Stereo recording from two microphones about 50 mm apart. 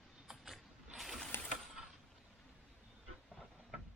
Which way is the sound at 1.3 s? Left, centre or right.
Left.